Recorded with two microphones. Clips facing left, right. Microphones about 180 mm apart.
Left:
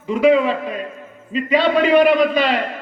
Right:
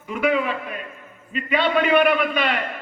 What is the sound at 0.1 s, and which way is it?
A man's voice, 30° left (ahead or behind).